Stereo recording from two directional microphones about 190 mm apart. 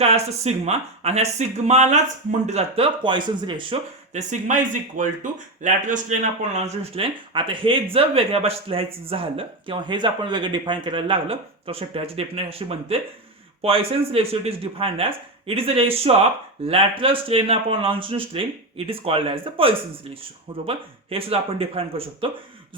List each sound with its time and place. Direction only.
0.0 s speech: 35° right (ahead or behind)
4.1 s speech: 40° right (ahead or behind)